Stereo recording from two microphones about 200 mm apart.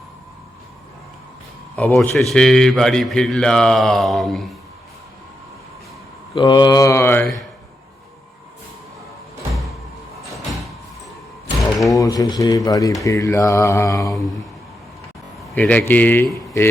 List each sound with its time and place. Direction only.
1.7 s a man's voice: 5° left (ahead or behind)
6.3 s speech: 20° left (ahead or behind); by 7.4 s 5° left (ahead or behind)
11.9 s speech: 15° left (ahead or behind)
15.5 s speech: 10° left (ahead or behind)